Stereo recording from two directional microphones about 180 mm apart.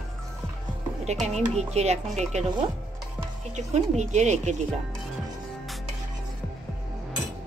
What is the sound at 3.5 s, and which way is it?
Speech, 40° right (ahead or behind).